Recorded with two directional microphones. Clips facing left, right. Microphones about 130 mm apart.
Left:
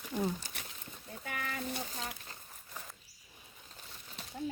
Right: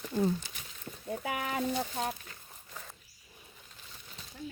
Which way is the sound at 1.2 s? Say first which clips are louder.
Right 6 dB; 70° right (ahead or behind).